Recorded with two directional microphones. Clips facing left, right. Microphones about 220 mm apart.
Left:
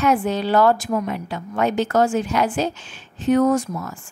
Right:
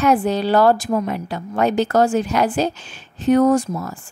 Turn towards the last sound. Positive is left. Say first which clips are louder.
# right 3 dB
turn(degrees=-35)  # may be behind; listen again after turning